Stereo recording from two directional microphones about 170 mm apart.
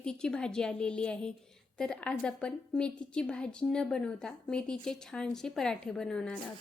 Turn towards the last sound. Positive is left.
turn(degrees=5)  # may be behind; listen again after turning